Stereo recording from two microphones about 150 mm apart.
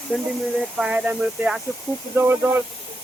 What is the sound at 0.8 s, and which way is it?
Speech, 10° right (ahead or behind).